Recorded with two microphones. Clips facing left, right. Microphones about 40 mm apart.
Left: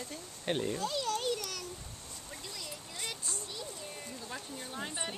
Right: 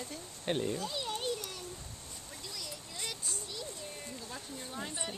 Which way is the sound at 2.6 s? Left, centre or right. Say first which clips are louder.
Right 1 dB; left.